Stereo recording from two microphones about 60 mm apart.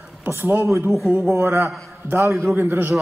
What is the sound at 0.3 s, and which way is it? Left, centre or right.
Mantra, right.